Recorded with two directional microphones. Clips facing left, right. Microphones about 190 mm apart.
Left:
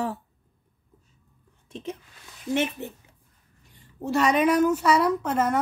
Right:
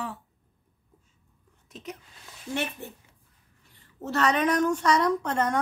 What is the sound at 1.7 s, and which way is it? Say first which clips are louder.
A woman's voice: left 5 dB; 25° left (ahead or behind).